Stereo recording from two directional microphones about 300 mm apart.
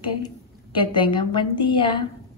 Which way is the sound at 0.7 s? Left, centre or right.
Centre.